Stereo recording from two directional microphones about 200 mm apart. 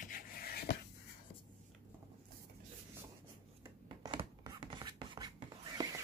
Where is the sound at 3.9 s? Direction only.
20° right (ahead or behind).